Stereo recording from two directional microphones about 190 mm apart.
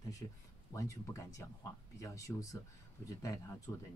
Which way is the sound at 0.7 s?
15° left (ahead or behind).